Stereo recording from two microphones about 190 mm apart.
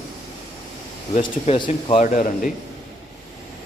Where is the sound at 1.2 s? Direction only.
35° left (ahead or behind).